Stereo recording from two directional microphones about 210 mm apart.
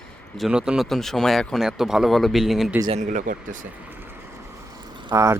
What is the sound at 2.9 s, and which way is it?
Speech, 35° right (ahead or behind).